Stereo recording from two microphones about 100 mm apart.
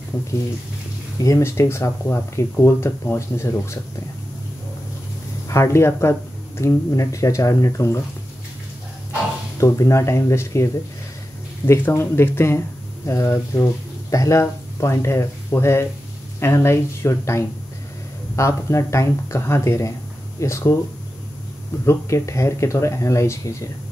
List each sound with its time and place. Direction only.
1.2 s speech: 30° left (ahead or behind)
5.5 s speech: 25° left (ahead or behind)
9.6 s speech: 30° left (ahead or behind)
21.8 s speech: 30° left (ahead or behind)